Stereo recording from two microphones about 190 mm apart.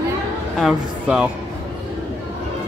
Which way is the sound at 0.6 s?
5° right (ahead or behind).